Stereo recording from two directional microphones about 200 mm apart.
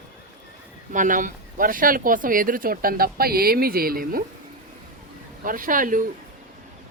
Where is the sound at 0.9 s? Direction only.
40° right (ahead or behind).